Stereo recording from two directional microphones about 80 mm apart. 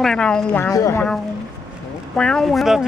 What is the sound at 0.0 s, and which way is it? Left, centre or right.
Speech, centre.